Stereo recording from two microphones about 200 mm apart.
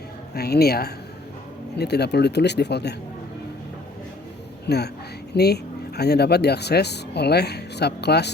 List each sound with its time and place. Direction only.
0.3 s speech: 50° left (ahead or behind)
4.6 s a woman's voice: 55° left (ahead or behind)